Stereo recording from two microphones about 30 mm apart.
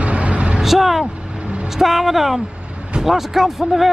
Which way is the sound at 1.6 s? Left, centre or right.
Centre.